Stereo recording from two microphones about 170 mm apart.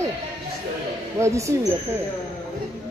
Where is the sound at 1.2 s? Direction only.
15° right (ahead or behind).